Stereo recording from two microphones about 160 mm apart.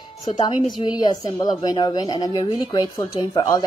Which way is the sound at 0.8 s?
25° left (ahead or behind).